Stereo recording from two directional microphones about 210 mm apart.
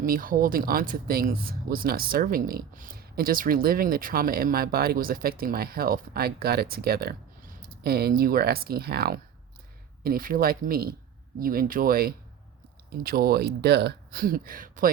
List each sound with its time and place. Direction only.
0.0 s speech: 40° right (ahead or behind)